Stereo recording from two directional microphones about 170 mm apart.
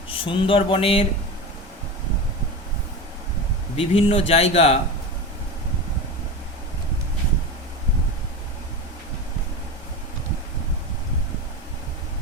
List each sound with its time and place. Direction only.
0.1 s speech: 30° left (ahead or behind)
3.8 s speech: 35° left (ahead or behind)